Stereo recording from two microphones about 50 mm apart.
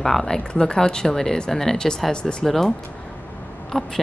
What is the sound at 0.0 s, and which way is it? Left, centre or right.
A woman's voice, centre.